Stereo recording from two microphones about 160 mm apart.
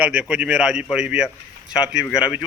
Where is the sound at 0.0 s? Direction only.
10° right (ahead or behind).